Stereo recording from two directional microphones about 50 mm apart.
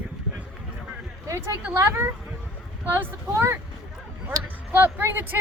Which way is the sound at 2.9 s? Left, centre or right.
Right.